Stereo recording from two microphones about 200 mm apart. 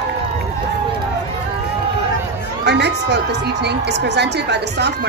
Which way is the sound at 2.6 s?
60° right (ahead or behind).